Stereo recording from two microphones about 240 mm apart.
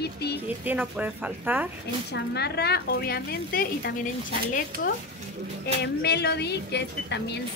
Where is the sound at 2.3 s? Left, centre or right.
Left.